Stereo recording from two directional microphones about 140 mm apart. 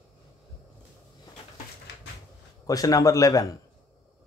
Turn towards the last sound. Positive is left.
turn(degrees=25)  # may be behind; listen again after turning